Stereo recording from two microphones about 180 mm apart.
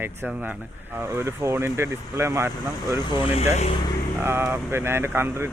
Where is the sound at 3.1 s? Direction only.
30° left (ahead or behind).